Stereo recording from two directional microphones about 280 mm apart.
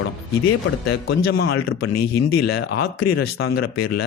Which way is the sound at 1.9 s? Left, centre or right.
Left.